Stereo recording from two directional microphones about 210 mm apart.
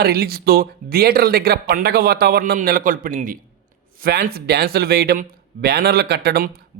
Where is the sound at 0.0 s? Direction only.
45° right (ahead or behind).